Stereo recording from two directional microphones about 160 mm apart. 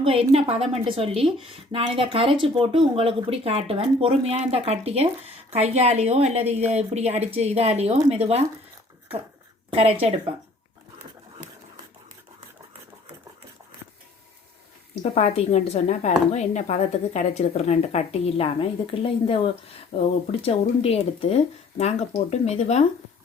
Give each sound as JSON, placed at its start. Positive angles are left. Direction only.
{"t": 0.0, "sound": "speech", "side_deg": -40}
{"t": 9.6, "sound": "speech", "side_deg": -40}
{"t": 15.1, "sound": "speech", "side_deg": 40}